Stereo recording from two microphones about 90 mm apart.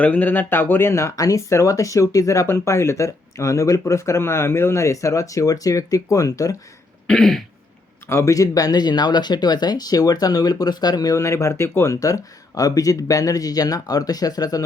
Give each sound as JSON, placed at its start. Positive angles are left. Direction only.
{"t": 0.0, "sound": "speech", "side_deg": 15}
{"t": 7.1, "sound": "throat clearing", "side_deg": 0}
{"t": 8.0, "sound": "speech", "side_deg": 30}